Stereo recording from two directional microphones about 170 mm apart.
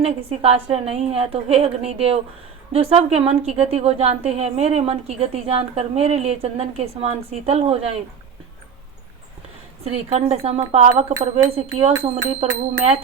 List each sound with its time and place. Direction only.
0.0 s a woman's voice: 35° right (ahead or behind)
9.8 s a woman's voice: 40° right (ahead or behind)